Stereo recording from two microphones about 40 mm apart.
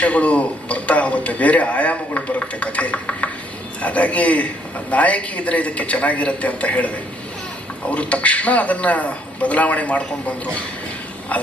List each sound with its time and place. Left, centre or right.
0.0 s a man's voice: left